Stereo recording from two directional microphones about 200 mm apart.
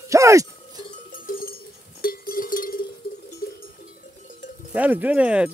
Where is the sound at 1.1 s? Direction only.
45° left (ahead or behind).